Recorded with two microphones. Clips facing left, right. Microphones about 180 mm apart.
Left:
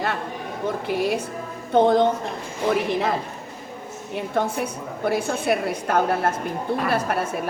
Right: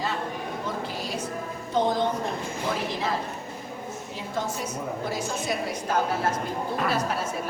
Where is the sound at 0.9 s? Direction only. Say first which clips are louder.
Left 8 dB; 60° left (ahead or behind).